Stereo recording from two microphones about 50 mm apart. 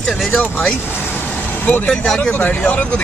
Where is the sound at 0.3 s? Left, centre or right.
Left.